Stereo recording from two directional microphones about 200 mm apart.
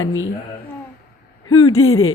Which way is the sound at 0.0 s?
80° left.